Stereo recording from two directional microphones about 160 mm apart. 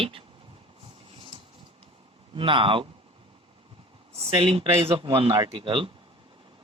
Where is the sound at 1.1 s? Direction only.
35° right (ahead or behind).